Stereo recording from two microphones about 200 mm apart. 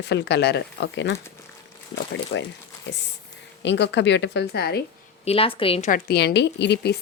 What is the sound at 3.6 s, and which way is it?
Speech, 60° left (ahead or behind).